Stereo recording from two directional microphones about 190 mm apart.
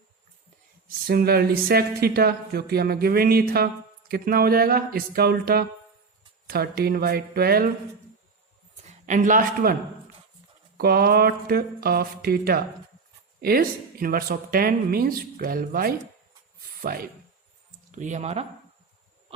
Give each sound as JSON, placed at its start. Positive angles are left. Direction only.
{"t": 1.0, "sound": "speech", "side_deg": -55}
{"t": 8.8, "sound": "speech", "side_deg": -40}
{"t": 10.8, "sound": "speech", "side_deg": -55}